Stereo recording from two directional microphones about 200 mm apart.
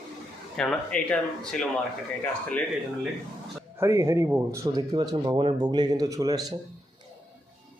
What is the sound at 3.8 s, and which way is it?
A man's voice, 15° right (ahead or behind).